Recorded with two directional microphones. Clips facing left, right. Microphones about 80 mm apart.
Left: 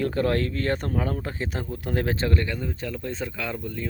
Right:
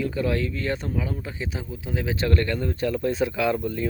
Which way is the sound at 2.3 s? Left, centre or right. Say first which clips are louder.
Right 3 dB; centre.